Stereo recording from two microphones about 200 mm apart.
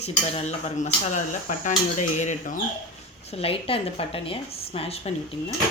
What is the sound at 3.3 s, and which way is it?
A woman's voice, 30° left (ahead or behind).